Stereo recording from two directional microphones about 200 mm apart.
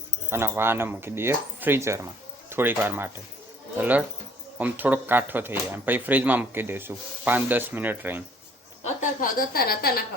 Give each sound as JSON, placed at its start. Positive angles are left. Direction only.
{"t": 0.3, "sound": "speech", "side_deg": -10}
{"t": 8.8, "sound": "a woman's voice", "side_deg": 40}